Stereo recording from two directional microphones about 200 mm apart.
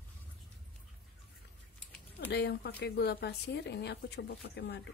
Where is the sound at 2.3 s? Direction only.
55° left (ahead or behind).